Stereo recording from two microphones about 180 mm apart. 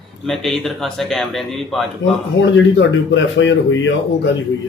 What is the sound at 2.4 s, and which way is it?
Speech, 90° left.